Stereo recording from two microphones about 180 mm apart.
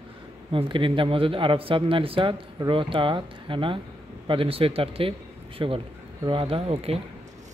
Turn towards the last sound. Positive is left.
turn(degrees=-30)  # may be behind; listen again after turning